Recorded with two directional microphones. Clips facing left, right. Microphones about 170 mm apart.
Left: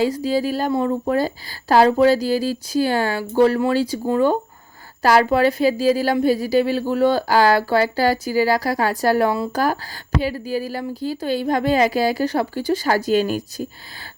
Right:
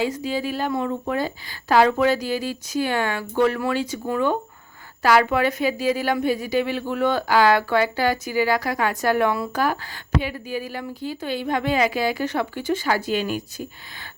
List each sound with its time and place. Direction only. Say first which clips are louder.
0.0 s speech: left 5 dB; 35° left (ahead or behind)